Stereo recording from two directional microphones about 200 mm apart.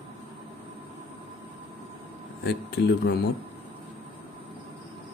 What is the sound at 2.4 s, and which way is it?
Speech, 55° left (ahead or behind).